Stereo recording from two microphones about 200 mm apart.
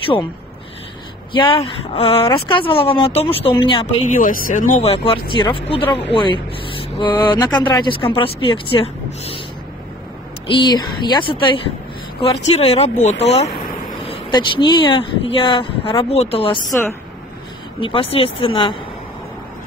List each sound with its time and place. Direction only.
1.3 s speech: 25° left (ahead or behind)
4.2 s speech: 45° left (ahead or behind)
4.8 s speech: 25° left (ahead or behind)
10.4 s speech: 25° left (ahead or behind)
14.0 s speech: 25° left (ahead or behind)
17.7 s speech: 25° left (ahead or behind)